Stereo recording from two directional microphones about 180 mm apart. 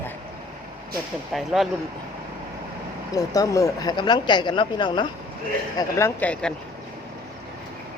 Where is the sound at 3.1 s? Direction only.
20° left (ahead or behind).